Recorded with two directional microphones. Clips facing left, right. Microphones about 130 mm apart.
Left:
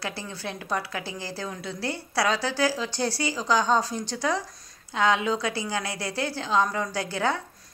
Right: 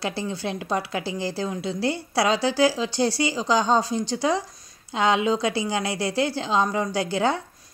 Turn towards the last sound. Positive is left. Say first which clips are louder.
# right 4 dB
turn(degrees=-20)  # may be behind; listen again after turning